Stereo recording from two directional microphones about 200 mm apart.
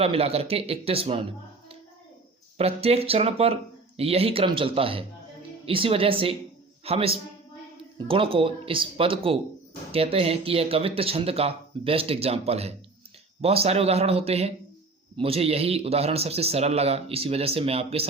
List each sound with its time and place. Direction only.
0.0 s speech: 30° right (ahead or behind)
2.6 s speech: 30° right (ahead or behind)